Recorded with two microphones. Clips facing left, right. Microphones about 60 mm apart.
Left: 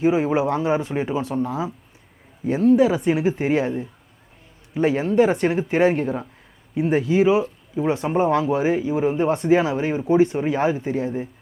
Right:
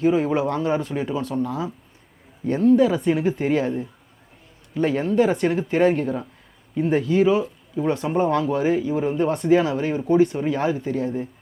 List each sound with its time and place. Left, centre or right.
0.0 s speech: centre